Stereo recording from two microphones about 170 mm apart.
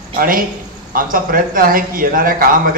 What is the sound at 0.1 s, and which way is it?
A man's voice, 55° right (ahead or behind).